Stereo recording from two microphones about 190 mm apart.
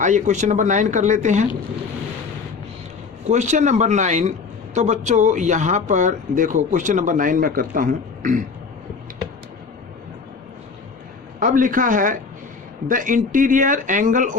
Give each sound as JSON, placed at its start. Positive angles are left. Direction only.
{"t": 0.0, "sound": "speech", "side_deg": -40}
{"t": 3.2, "sound": "speech", "side_deg": -35}
{"t": 11.3, "sound": "speech", "side_deg": -45}